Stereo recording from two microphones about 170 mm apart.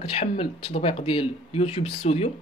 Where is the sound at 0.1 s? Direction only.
35° left (ahead or behind).